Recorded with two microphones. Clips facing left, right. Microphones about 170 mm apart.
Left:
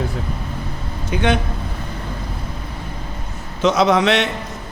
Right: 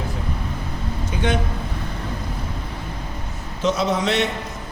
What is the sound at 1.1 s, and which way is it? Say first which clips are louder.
Speech: left 5 dB; 75° left (ahead or behind).